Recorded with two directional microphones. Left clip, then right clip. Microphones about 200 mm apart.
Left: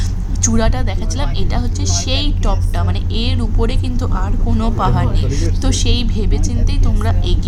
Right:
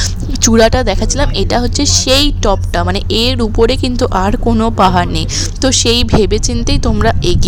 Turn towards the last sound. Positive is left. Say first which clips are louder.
# right 11 dB
turn(degrees=-40)  # may be behind; listen again after turning